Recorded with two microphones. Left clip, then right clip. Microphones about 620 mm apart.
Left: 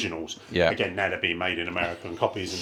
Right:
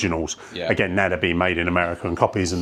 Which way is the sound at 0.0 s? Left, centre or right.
Right.